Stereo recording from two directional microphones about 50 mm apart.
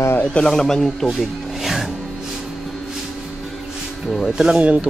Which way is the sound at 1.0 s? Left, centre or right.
Centre.